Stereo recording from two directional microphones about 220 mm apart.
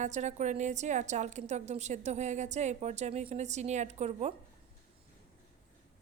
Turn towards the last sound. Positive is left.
turn(degrees=-30)  # may be behind; listen again after turning